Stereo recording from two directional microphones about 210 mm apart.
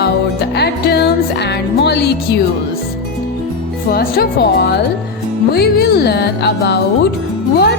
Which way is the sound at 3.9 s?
45° left (ahead or behind).